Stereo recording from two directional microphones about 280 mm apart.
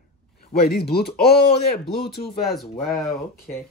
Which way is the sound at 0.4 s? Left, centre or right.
Left.